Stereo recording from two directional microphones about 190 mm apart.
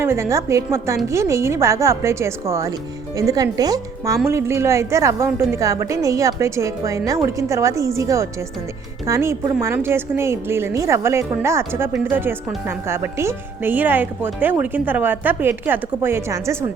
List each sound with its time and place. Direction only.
0.0 s a woman's voice: 15° right (ahead or behind)